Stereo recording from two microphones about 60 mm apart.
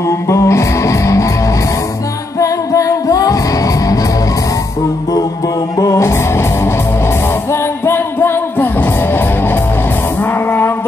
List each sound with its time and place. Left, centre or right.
0.1 s music: left
2.3 s music: left
5.9 s music: left